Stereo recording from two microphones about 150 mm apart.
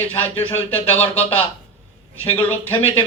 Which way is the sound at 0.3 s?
10° left (ahead or behind).